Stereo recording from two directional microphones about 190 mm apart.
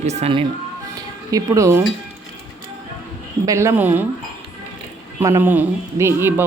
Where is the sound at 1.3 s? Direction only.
15° right (ahead or behind).